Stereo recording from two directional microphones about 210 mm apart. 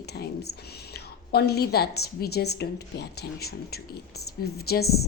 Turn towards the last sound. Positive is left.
turn(degrees=50)  # may be behind; listen again after turning